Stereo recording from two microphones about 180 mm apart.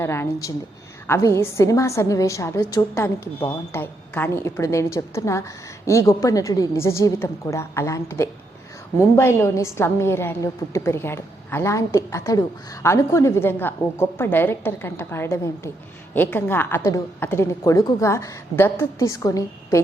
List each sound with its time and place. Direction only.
0.0 s a woman's voice: 15° left (ahead or behind)